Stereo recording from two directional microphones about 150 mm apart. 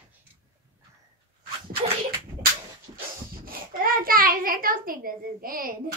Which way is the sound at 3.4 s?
75° right (ahead or behind).